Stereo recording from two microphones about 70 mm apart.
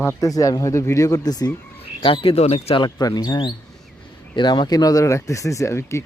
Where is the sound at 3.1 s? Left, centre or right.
Left.